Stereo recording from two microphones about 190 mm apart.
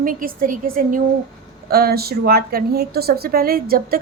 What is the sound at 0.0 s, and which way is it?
A woman's voice, 45° right (ahead or behind).